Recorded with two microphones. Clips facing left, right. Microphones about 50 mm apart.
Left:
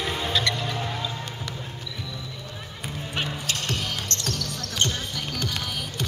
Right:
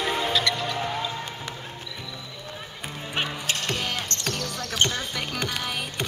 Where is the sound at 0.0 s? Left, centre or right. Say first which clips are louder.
Right 3 dB; centre.